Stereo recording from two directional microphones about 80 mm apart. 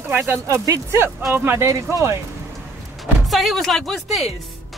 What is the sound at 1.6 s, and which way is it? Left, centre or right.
Speech, right.